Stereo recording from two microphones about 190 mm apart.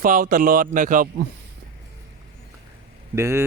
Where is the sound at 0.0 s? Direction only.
45° right (ahead or behind).